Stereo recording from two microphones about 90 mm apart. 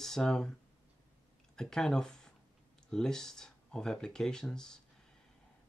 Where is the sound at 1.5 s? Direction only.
5° left (ahead or behind).